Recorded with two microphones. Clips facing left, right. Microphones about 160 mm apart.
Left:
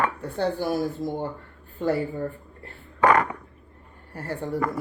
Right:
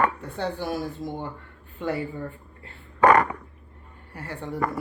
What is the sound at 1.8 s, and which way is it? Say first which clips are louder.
Speech: left 4 dB; 35° left (ahead or behind).